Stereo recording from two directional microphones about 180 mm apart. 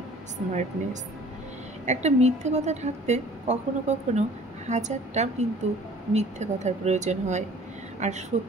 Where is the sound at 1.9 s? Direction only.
40° right (ahead or behind).